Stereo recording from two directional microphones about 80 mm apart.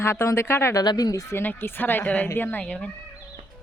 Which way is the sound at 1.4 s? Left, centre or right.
Left.